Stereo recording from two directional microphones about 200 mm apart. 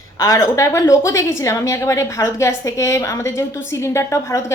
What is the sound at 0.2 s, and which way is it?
A woman's voice, 15° left (ahead or behind).